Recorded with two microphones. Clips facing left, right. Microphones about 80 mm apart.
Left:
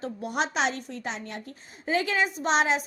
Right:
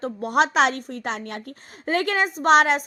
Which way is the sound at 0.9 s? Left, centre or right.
Right.